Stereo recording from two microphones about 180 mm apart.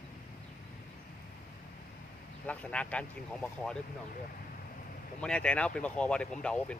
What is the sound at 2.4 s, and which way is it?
Speech, 5° left (ahead or behind).